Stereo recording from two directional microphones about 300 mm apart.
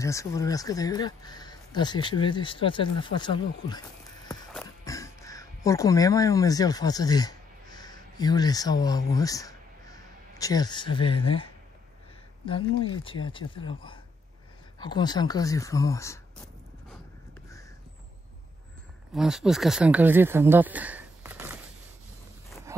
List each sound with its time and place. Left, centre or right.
0.0 s speech: centre
4.6 s music: centre
12.7 s speech: centre
19.1 s speech: centre
22.7 s a sound: centre